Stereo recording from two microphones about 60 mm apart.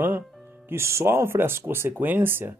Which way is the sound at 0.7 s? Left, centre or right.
Right.